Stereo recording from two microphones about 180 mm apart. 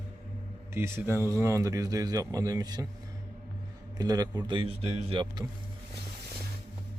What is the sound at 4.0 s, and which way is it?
A man's voice, 20° right (ahead or behind).